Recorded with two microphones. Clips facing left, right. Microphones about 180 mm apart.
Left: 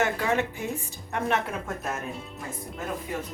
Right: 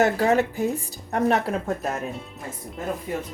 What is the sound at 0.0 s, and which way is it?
Speech, 40° right (ahead or behind).